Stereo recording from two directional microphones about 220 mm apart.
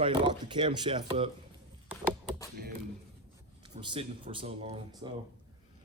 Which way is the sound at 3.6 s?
20° right (ahead or behind).